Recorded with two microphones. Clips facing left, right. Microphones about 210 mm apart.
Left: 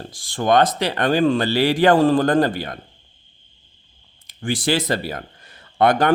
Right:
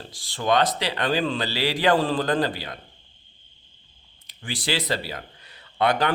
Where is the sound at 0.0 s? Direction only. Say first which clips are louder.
Left 5 dB; 50° left (ahead or behind).